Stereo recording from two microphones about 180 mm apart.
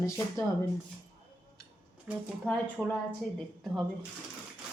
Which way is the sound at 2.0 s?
Centre (ahead or behind).